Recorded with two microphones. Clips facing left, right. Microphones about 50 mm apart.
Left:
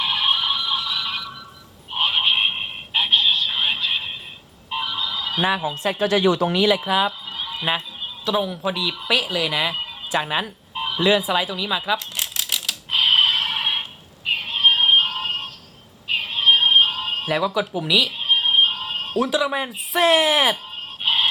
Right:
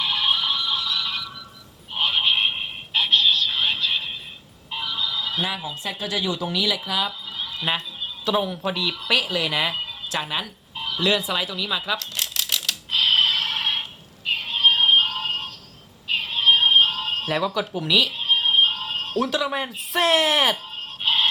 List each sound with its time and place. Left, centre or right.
0.0 s a sound: centre
5.5 s speech: left
6.5 s speech: left; by 7.7 s centre
8.2 s speech: centre
9.8 s music: centre
10.4 s a sound: left
14.3 s synthetic singing: centre
16.0 s music: centre